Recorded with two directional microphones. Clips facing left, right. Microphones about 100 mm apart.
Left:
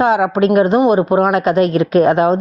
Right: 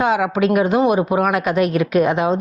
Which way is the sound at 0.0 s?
40° left (ahead or behind).